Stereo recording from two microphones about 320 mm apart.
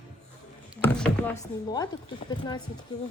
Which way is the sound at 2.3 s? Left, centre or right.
Centre.